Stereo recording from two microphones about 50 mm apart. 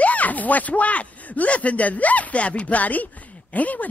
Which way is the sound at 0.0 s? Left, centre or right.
Left.